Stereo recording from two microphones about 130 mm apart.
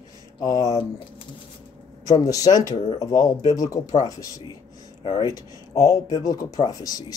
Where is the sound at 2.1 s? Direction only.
25° left (ahead or behind).